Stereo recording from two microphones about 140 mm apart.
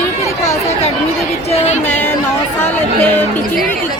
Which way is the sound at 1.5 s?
50° left (ahead or behind).